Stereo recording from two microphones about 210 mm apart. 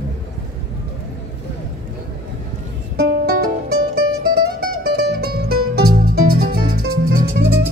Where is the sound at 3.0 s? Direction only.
45° right (ahead or behind).